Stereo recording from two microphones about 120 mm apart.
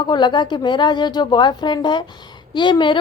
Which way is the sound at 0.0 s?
40° left (ahead or behind).